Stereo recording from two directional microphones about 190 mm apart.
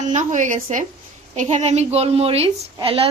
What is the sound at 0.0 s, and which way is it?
A woman's voice, 40° right (ahead or behind).